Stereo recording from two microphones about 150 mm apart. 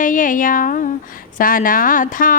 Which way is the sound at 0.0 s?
60° left (ahead or behind).